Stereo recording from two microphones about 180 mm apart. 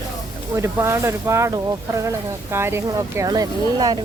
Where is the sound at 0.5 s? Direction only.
15° right (ahead or behind).